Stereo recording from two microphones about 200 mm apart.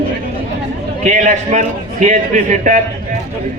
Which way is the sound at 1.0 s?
35° right (ahead or behind).